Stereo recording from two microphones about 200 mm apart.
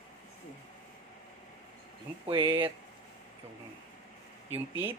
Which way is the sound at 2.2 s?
30° right (ahead or behind).